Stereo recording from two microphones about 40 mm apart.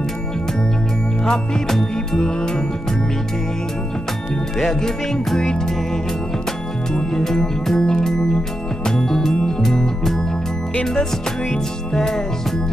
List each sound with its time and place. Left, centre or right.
1.2 s music: centre
4.6 s music: centre
6.9 s music: centre
11.9 s music: centre